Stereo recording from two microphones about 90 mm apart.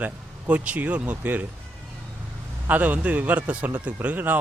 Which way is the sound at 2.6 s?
15° right (ahead or behind).